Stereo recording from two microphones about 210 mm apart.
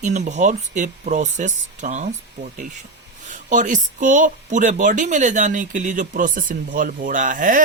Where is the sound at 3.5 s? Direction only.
35° right (ahead or behind).